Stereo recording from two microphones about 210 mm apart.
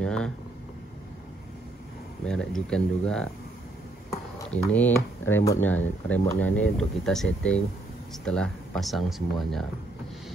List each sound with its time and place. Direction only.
0.0 s a sound: 5° left (ahead or behind)
2.2 s speech: 5° left (ahead or behind)
4.7 s speech: 10° left (ahead or behind)